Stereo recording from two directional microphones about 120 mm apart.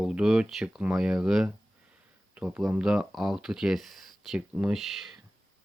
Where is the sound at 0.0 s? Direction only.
5° right (ahead or behind).